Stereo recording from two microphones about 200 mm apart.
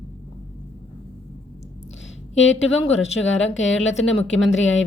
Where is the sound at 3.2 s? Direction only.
70° left (ahead or behind).